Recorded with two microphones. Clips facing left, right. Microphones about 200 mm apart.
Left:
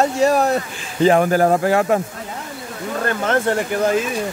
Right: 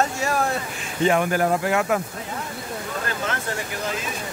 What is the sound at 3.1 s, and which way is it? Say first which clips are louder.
Speech: left 12 dB; 55° left (ahead or behind).